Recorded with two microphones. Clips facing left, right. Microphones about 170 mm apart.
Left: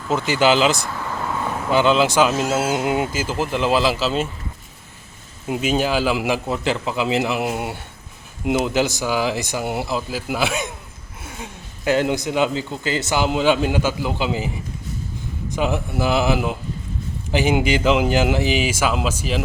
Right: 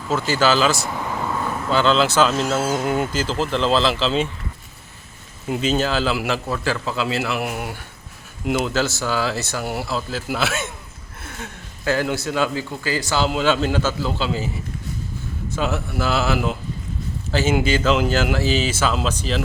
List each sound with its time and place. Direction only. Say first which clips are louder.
0.1 s speech: left 2 dB; 15° left (ahead or behind)
0.9 s speech: right 2 dB; 15° right (ahead or behind)
1.5 s speech: left 2 dB; 15° left (ahead or behind)
5.5 s a man's voice: left 1 dB; 10° left (ahead or behind)